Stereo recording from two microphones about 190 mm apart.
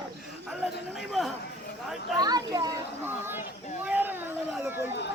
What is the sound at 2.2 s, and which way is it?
Children playing, 20° right (ahead or behind).